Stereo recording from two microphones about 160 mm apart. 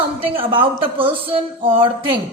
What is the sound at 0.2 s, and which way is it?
Speech, 35° right (ahead or behind).